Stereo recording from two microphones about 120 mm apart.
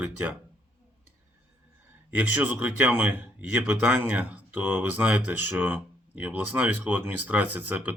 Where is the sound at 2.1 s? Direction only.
10° right (ahead or behind).